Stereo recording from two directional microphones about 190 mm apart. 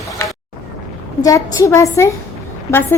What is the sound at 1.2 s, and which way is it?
A woman's voice, 15° left (ahead or behind).